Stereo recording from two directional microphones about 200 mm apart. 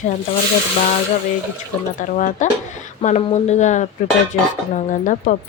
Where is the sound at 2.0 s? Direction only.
40° left (ahead or behind).